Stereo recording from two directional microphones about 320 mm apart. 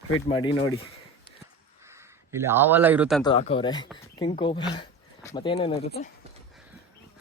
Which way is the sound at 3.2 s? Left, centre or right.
Centre.